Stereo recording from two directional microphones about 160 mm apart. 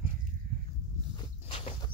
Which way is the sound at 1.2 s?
35° left (ahead or behind).